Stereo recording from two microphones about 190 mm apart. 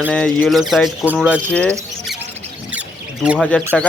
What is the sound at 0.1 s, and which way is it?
A man's voice, 5° left (ahead or behind).